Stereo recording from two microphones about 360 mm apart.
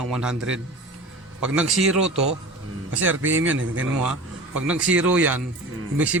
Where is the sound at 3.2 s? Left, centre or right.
Right.